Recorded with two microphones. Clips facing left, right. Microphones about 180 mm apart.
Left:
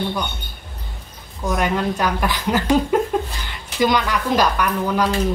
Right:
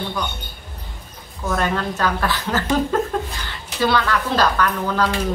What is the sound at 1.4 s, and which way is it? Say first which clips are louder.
A woman's voice: left 1 dB; 15° left (ahead or behind).